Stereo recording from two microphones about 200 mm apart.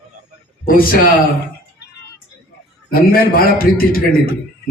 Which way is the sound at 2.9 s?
45° left (ahead or behind).